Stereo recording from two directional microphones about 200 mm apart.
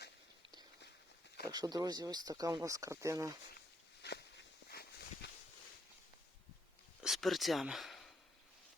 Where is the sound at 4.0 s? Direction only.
55° left (ahead or behind).